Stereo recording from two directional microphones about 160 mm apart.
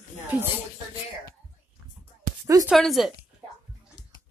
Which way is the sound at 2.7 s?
Centre (ahead or behind).